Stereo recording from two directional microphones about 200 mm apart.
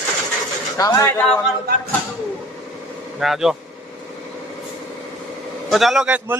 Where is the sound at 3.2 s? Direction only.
Centre (ahead or behind).